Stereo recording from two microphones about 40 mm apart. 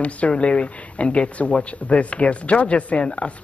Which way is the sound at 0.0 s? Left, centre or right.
Left.